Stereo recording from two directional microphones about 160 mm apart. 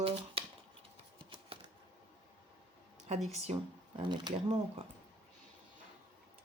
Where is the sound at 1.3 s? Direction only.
30° right (ahead or behind).